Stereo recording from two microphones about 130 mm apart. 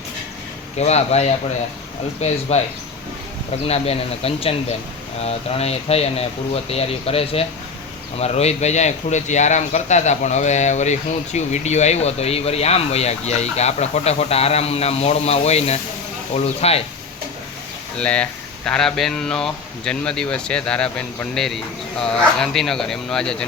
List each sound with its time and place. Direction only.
0.8 s a man's voice: 55° left (ahead or behind)
3.7 s a man's voice: 50° left (ahead or behind)
17.9 s speech: 10° left (ahead or behind)